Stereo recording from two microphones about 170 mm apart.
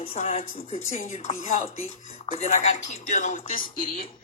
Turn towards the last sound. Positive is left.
turn(degrees=50)  # may be behind; listen again after turning